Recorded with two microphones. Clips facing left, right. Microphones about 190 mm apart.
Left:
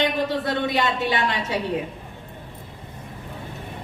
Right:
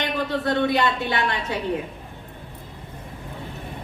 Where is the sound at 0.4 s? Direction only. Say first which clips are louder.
Right 2 dB; 20° left (ahead or behind).